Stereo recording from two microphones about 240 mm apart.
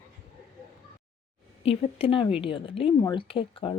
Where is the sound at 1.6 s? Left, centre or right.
Left.